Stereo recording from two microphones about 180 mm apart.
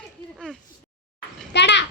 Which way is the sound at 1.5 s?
75° left (ahead or behind).